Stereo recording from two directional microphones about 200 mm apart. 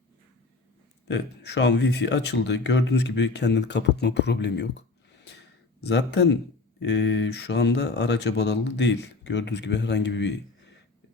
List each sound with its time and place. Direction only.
1.0 s speech: 60° left (ahead or behind)
5.8 s speech: 60° left (ahead or behind)